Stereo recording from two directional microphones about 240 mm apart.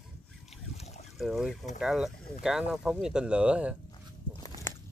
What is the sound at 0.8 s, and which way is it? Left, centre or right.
Boat, left.